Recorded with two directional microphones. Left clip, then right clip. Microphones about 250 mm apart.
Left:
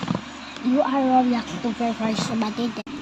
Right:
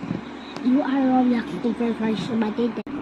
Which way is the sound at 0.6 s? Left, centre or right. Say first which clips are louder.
Right 1 dB; left.